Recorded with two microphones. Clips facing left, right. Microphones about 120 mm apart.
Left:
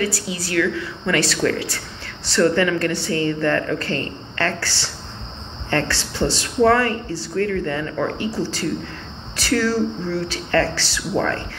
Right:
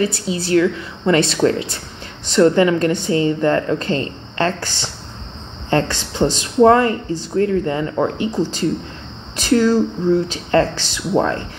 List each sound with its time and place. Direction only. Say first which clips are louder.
0.0 s speech: right 4 dB; 25° right (ahead or behind)